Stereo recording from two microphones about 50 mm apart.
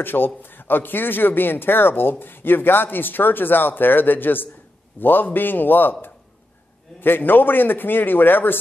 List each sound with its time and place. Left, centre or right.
0.0 s a man's voice: left